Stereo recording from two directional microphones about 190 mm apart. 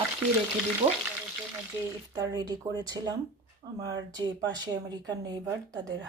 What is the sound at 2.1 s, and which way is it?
Speech, 20° right (ahead or behind).